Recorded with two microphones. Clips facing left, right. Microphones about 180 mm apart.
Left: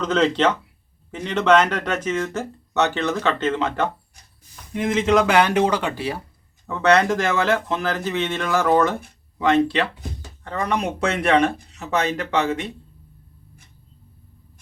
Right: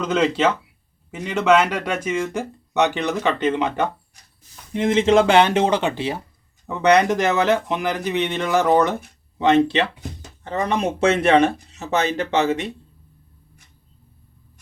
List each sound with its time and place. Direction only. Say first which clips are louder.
0.0 s speech: even; 10° right (ahead or behind)
4.7 s speech: right 3 dB; 25° right (ahead or behind)